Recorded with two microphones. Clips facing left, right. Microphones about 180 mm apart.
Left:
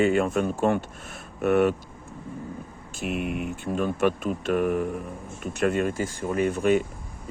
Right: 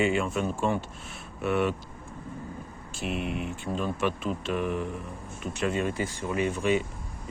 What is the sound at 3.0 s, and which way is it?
Speech, 50° left (ahead or behind).